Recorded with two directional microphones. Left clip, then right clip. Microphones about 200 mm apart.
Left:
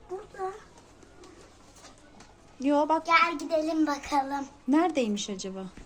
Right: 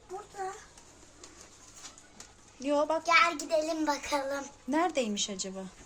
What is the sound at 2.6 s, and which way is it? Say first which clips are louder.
Speech: left 3 dB; 15° left (ahead or behind).